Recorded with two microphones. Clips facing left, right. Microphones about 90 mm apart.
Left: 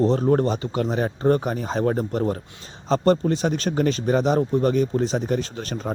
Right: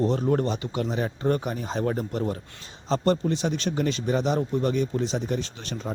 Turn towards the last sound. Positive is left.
turn(degrees=45)  # may be behind; listen again after turning